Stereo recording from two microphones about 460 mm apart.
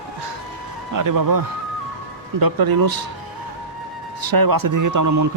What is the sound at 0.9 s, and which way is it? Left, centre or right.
A man's voice, right.